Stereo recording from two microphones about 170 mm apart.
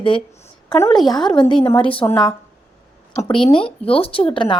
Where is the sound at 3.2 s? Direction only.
30° left (ahead or behind).